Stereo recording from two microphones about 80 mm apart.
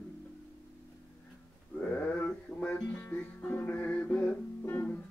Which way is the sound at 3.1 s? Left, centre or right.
Left.